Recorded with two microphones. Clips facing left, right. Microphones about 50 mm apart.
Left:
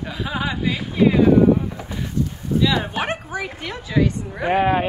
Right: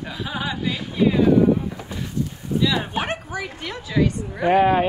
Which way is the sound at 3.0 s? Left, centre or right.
Left.